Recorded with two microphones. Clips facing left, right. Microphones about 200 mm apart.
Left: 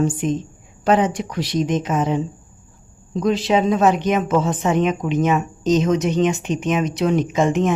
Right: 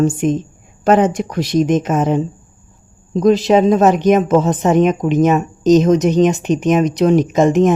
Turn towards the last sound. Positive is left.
turn(degrees=-40)  # may be behind; listen again after turning